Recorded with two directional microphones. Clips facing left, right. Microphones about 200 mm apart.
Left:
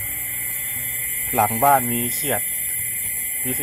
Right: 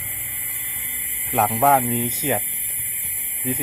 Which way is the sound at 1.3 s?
Centre (ahead or behind).